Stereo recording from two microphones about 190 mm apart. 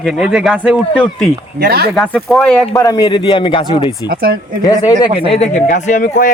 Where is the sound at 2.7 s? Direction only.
20° left (ahead or behind).